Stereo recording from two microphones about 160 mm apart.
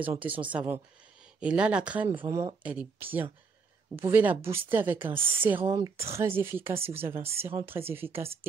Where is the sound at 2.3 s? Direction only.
15° right (ahead or behind).